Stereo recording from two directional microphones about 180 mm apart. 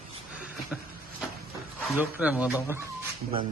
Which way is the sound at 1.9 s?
5° right (ahead or behind).